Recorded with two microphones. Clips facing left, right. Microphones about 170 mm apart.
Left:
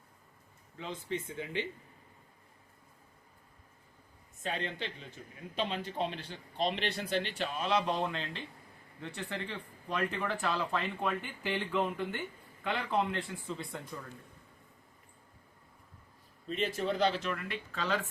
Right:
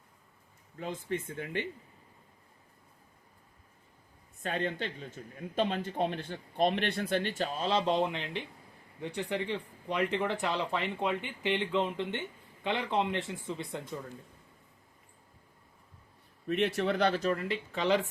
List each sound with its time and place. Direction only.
0.8 s speech: 50° right (ahead or behind)
4.4 s speech: 50° right (ahead or behind); by 13.7 s 20° right (ahead or behind)
16.5 s a man's voice: 70° right (ahead or behind)
17.2 s speech: 30° right (ahead or behind)